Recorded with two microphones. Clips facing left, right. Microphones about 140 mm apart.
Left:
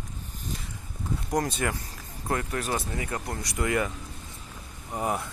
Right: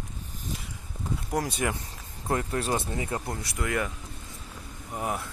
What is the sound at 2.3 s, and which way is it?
Speech, 25° right (ahead or behind).